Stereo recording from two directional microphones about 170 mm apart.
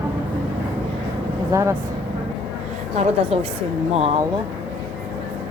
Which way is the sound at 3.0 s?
40° right (ahead or behind).